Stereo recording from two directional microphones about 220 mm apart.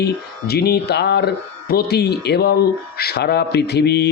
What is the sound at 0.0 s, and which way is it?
Speech, 45° left (ahead or behind).